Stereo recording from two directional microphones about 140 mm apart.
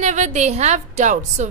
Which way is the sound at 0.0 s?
55° right (ahead or behind).